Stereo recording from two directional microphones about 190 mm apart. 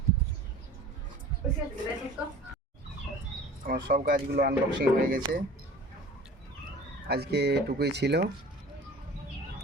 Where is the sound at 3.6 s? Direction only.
45° right (ahead or behind).